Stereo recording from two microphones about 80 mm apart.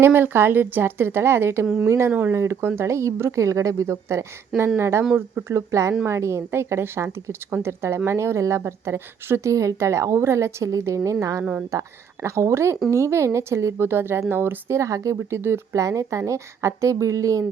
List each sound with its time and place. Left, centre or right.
0.0 s a woman's voice: right
5.5 s a woman's voice: right
14.8 s speech: right